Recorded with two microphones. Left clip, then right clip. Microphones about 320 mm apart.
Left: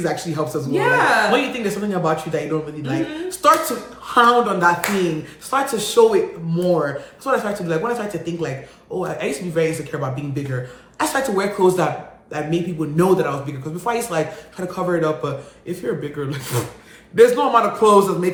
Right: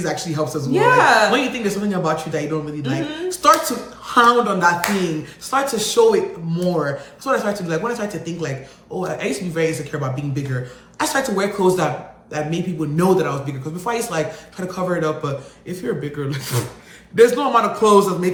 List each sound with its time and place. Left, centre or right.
0.0 s speech: centre
0.7 s speech: centre
1.3 s speech: centre